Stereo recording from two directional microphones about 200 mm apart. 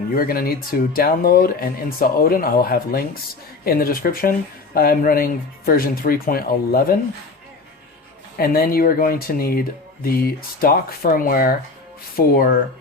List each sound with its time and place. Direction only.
0.2 s speech: 45° left (ahead or behind)
8.4 s speech: 45° left (ahead or behind)